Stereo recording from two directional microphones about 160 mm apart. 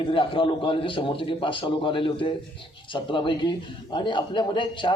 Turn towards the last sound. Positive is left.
turn(degrees=30)  # may be behind; listen again after turning